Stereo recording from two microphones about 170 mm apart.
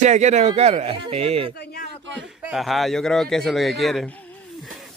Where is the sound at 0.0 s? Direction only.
45° right (ahead or behind).